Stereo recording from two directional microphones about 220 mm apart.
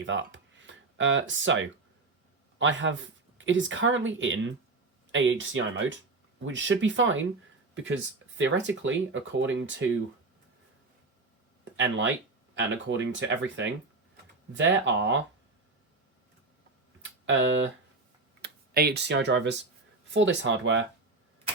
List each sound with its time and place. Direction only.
0.0 s speech: 60° right (ahead or behind)
11.8 s speech: 60° right (ahead or behind)
17.2 s speech: 60° right (ahead or behind)
18.4 s speech: 45° right (ahead or behind)